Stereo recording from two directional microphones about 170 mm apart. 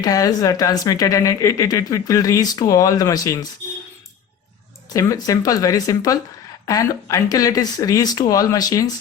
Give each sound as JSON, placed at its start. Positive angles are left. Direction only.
{"t": 0.0, "sound": "speech", "side_deg": 20}
{"t": 4.9, "sound": "speech", "side_deg": 20}